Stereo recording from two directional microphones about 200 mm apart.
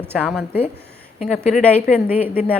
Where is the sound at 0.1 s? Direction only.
5° left (ahead or behind).